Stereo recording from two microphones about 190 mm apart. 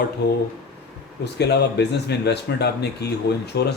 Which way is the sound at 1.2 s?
60° left (ahead or behind).